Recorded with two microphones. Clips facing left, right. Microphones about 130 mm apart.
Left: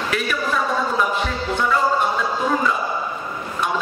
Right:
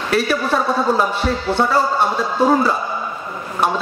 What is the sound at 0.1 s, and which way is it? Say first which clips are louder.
A man's voice: right 7 dB; 35° right (ahead or behind).